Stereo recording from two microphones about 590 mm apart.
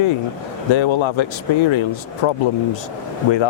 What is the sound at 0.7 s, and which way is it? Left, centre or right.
Speech, left.